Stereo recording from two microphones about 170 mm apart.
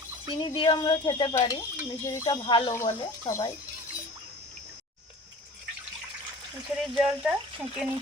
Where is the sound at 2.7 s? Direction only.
15° left (ahead or behind).